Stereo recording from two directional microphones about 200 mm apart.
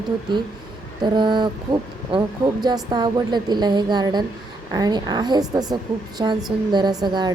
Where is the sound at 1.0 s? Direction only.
25° right (ahead or behind).